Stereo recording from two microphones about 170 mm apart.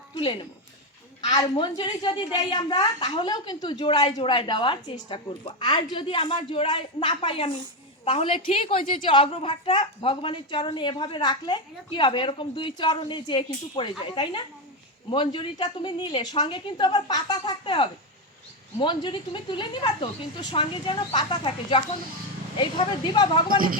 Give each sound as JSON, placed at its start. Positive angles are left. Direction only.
{"t": 0.2, "sound": "a child's voice", "side_deg": 30}
{"t": 23.5, "sound": "speech", "side_deg": -55}